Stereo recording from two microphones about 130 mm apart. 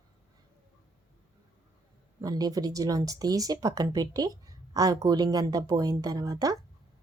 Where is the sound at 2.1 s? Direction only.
30° right (ahead or behind).